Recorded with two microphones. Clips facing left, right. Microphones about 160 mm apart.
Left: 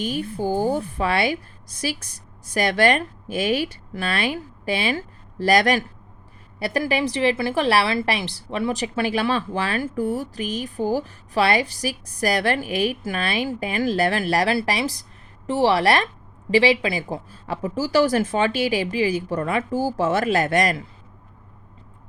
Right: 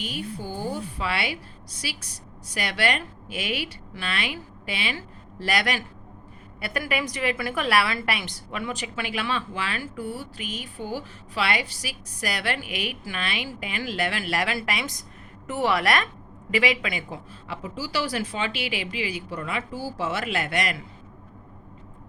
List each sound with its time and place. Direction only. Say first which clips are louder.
0.0 s a woman's voice: left 8 dB; 45° left (ahead or behind)